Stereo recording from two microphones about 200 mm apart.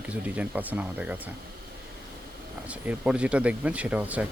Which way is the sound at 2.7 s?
5° right (ahead or behind).